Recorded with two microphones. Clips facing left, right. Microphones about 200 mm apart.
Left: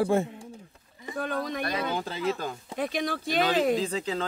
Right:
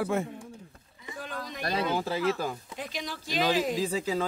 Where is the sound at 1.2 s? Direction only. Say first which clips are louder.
Left 8 dB; 55° left (ahead or behind).